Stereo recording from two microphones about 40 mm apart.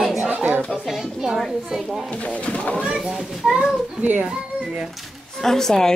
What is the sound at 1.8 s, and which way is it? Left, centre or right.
Speech, centre.